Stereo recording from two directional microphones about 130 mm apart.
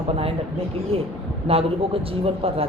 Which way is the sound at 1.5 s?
50° right (ahead or behind).